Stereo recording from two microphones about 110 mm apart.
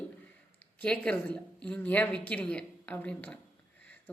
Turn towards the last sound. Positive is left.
turn(degrees=10)  # may be behind; listen again after turning